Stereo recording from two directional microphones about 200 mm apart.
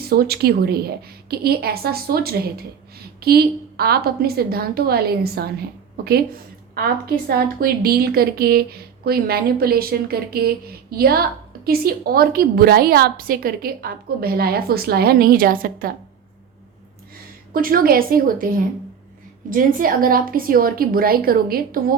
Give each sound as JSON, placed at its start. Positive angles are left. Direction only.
{"t": 0.0, "sound": "a woman's voice", "side_deg": -50}
{"t": 6.7, "sound": "a woman's voice", "side_deg": -50}
{"t": 17.5, "sound": "a woman's voice", "side_deg": -45}